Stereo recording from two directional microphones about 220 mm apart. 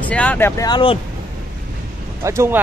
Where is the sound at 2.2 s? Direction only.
10° right (ahead or behind).